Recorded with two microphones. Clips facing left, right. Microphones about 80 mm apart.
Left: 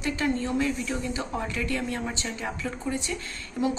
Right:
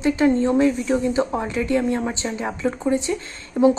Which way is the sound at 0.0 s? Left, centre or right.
Right.